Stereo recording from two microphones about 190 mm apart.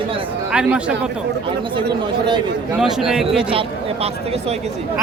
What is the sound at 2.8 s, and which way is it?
Speech, centre (ahead or behind).